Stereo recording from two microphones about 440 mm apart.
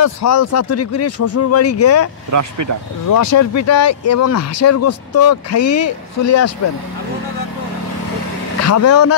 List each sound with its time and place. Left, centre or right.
0.0 s speech: left
2.3 s speech: right
3.1 s speech: left
8.6 s speech: left